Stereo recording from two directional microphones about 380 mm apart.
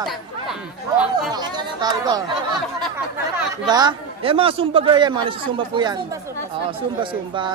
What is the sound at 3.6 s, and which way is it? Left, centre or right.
Speech, centre.